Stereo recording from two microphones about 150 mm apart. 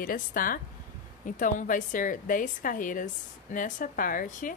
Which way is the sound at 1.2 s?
60° left (ahead or behind).